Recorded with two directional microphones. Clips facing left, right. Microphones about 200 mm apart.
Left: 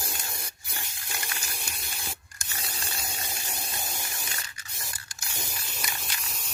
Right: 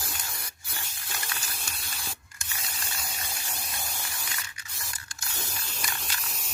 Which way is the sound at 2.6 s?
25° left (ahead or behind).